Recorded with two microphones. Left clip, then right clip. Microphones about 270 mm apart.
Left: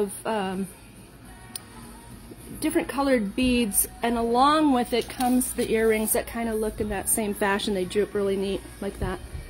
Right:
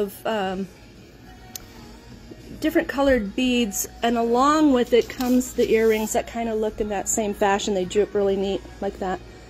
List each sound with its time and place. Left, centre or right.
0.0 s a woman's voice: centre
2.6 s a woman's voice: centre